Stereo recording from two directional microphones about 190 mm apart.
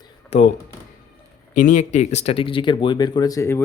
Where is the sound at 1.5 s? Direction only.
40° left (ahead or behind).